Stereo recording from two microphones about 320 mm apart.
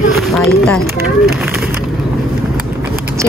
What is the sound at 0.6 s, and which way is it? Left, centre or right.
Speech, centre.